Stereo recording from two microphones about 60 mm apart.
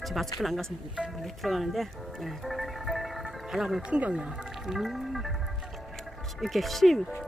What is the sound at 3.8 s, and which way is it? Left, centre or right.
Speech, centre.